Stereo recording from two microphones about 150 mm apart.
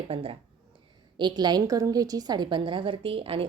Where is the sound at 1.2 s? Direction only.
30° right (ahead or behind).